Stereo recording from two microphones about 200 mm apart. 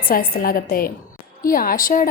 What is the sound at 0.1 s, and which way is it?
A woman's voice, 45° left (ahead or behind).